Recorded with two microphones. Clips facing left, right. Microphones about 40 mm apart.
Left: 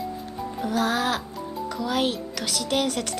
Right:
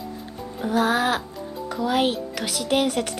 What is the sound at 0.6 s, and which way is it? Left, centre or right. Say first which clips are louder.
A woman's voice: right 3 dB; centre.